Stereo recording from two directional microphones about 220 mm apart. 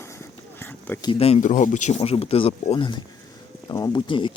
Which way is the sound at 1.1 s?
25° left (ahead or behind).